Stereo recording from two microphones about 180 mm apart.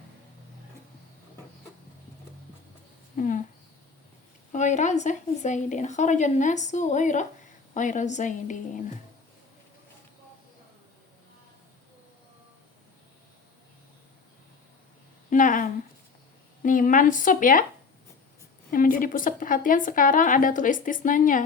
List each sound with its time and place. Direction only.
3.2 s speech: 45° left (ahead or behind)
4.5 s a woman's voice: 40° left (ahead or behind)
15.3 s a sound: 45° left (ahead or behind)
16.6 s speech: 45° left (ahead or behind)
18.7 s speech: 50° left (ahead or behind)